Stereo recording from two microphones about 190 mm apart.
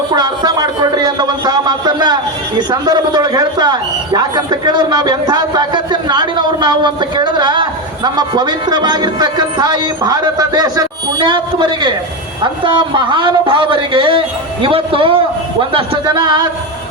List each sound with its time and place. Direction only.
0.1 s a man's voice: 20° right (ahead or behind)